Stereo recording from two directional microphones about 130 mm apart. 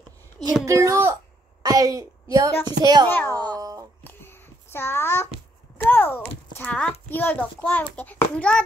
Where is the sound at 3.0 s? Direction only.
15° left (ahead or behind).